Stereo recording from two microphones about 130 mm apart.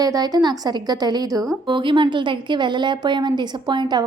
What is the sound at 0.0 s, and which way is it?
A woman's voice, 30° right (ahead or behind).